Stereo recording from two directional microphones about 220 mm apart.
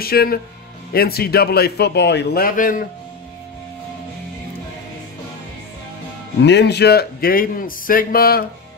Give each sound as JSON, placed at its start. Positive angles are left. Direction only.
{"t": 0.0, "sound": "a man's voice", "side_deg": 45}
{"t": 6.4, "sound": "a man's voice", "side_deg": 50}